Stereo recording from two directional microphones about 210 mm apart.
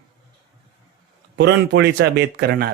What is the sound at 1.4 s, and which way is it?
A man's voice, 55° right (ahead or behind).